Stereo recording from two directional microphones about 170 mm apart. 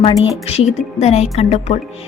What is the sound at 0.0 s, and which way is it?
A woman's voice, 35° left (ahead or behind).